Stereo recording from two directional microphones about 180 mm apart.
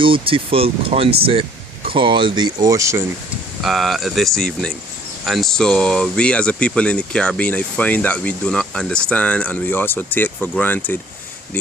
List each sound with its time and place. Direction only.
0.0 s speech: 30° right (ahead or behind)
3.6 s speech: centre (ahead or behind)